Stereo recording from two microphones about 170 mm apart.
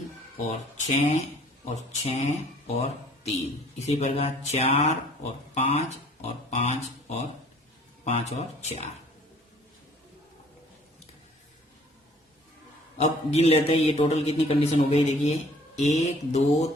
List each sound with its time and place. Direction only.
0.4 s a man's voice: 40° left (ahead or behind)
13.0 s a man's voice: 40° left (ahead or behind)